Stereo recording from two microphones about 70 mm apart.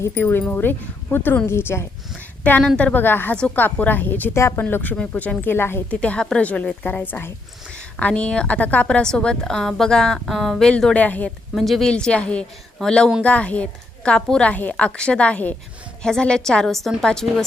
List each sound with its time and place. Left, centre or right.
0.2 s speech: left
2.1 s a sound: left
2.7 s speech: centre
3.0 s speech: left
3.3 s a woman's voice: centre
3.6 s speech: left
4.4 s speech: left
4.7 s speech: left
5.9 s a woman's voice: centre
10.6 s a woman's voice: centre
11.0 s speech: left
11.5 s a woman's voice: centre